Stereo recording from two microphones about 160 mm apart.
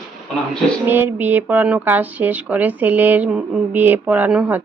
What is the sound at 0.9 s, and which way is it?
Speech, 10° right (ahead or behind).